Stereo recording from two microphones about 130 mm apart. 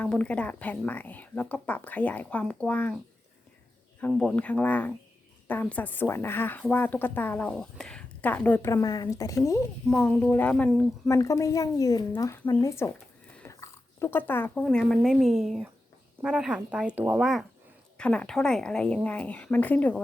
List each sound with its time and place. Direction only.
0.0 s speech: 10° left (ahead or behind)
4.2 s speech: 5° left (ahead or behind)
8.7 s speech: 30° left (ahead or behind)
9.9 s speech: 10° left (ahead or behind)
11.1 s speech: 25° left (ahead or behind); by 17.2 s 15° right (ahead or behind)
17.9 s speech: 10° left (ahead or behind)